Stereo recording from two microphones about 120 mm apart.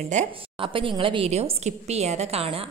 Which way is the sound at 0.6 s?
45° right (ahead or behind).